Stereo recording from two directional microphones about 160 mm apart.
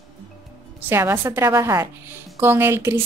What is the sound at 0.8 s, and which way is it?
A woman's voice, 15° right (ahead or behind).